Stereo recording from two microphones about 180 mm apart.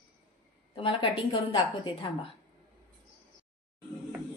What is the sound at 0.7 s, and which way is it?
A woman's voice, 30° left (ahead or behind).